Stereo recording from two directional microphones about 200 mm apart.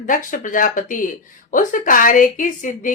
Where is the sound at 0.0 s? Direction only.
40° left (ahead or behind).